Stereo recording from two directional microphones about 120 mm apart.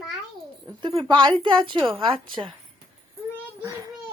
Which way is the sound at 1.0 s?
35° right (ahead or behind).